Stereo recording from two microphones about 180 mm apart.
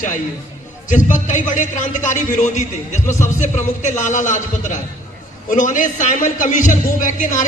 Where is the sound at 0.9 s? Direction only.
45° left (ahead or behind).